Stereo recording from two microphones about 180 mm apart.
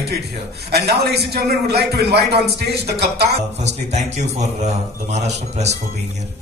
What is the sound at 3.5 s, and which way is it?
A man's voice, 40° right (ahead or behind).